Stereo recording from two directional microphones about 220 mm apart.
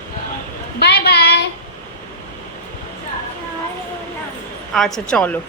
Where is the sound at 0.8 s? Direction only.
45° left (ahead or behind).